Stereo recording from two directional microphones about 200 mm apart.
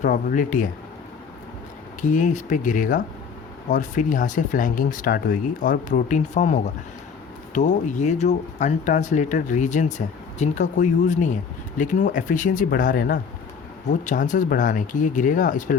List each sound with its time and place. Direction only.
0.0 s speech: 40° left (ahead or behind)
2.0 s speech: 40° left (ahead or behind)